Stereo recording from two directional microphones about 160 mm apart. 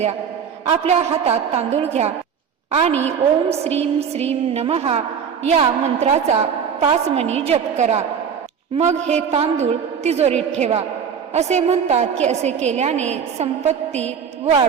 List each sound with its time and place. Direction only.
0.7 s a woman's voice: 40° right (ahead or behind)